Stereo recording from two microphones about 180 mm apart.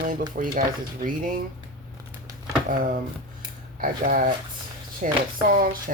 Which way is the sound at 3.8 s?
50° right (ahead or behind).